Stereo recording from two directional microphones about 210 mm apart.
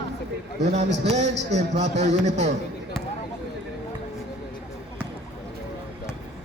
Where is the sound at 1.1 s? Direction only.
30° right (ahead or behind).